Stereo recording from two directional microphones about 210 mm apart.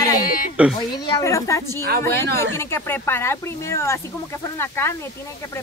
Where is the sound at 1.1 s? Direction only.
15° left (ahead or behind).